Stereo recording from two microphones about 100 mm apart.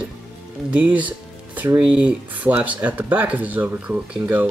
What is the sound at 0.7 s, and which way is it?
Speech, 15° right (ahead or behind).